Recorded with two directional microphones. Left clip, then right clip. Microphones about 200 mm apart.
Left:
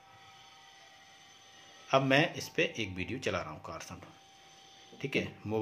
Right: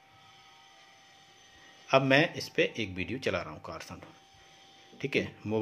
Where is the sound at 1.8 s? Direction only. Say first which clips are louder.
Right 3 dB; 25° right (ahead or behind).